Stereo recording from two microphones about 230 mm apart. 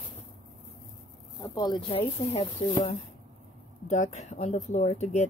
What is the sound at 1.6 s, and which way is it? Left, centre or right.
Speech, centre.